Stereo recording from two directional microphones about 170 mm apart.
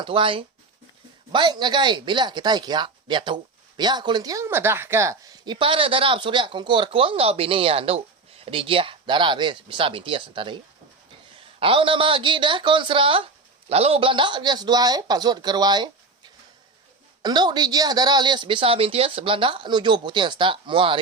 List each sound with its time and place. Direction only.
0.0 s speech: 30° right (ahead or behind)
17.2 s speech: 25° right (ahead or behind)